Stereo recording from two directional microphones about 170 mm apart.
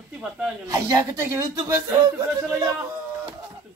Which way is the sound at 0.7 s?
20° right (ahead or behind).